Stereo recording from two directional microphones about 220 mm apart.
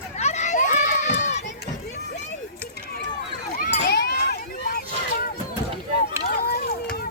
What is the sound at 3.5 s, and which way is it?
Run, 45° left (ahead or behind).